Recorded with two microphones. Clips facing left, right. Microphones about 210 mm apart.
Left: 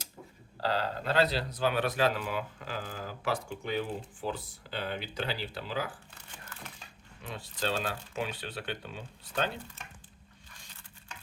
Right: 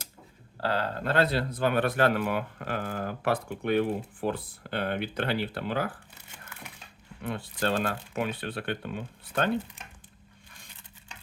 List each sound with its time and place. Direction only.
0.6 s speech: 55° right (ahead or behind)
7.2 s speech: 55° right (ahead or behind)